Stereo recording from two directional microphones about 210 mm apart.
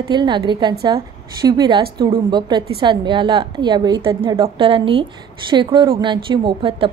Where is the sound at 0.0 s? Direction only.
20° right (ahead or behind).